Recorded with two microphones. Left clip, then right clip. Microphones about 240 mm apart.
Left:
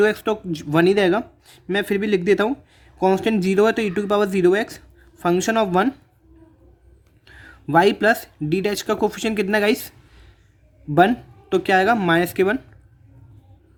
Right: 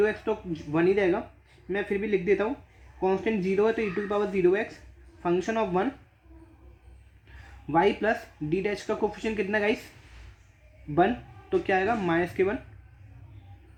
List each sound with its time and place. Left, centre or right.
0.0 s speech: left
7.3 s a sound: left
7.7 s speech: left
10.9 s speech: left